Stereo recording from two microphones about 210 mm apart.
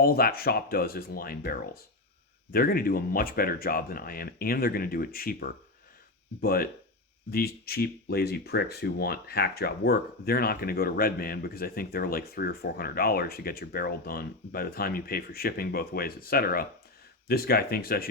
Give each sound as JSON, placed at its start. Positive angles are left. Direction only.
{"t": 0.0, "sound": "speech", "side_deg": 45}